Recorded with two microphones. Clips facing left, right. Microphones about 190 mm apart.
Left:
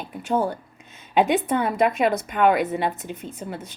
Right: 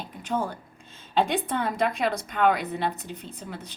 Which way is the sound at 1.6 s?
60° left (ahead or behind).